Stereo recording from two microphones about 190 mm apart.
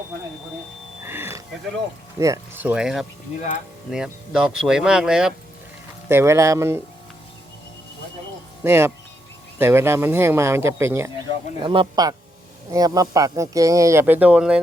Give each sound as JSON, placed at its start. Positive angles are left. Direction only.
{"t": 1.0, "sound": "music", "side_deg": -10}
{"t": 2.1, "sound": "speech", "side_deg": -15}
{"t": 8.6, "sound": "speech", "side_deg": -10}
{"t": 11.6, "sound": "speech", "side_deg": -25}